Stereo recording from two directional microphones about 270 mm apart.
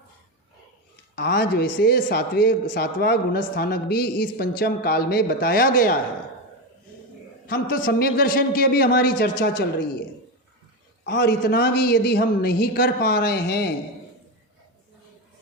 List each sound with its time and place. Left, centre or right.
1.1 s a man's voice: left
7.4 s a man's voice: left
11.0 s a man's voice: left